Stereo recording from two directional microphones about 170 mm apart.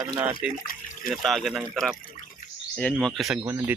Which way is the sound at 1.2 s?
Centre (ahead or behind).